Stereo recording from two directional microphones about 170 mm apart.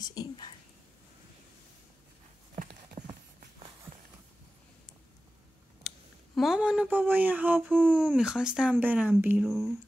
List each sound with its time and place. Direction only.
0.0 s speech: 20° left (ahead or behind)
3.0 s a sound: 45° right (ahead or behind)
5.9 s speech: centre (ahead or behind)